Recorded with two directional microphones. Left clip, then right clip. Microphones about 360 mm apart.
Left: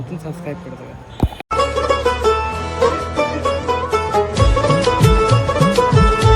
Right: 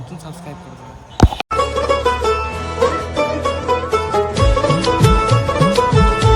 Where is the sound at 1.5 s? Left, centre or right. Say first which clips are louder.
Left 4 dB; centre.